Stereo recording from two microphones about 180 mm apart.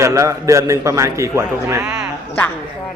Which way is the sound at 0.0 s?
15° right (ahead or behind).